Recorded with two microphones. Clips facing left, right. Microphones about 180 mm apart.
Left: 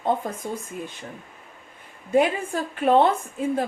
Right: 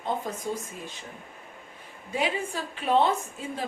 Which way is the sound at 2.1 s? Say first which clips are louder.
Left 8 dB; 50° left (ahead or behind).